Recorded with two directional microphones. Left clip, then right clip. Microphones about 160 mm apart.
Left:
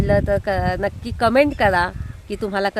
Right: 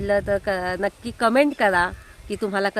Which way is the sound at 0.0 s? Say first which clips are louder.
Left 3 dB; 20° left (ahead or behind).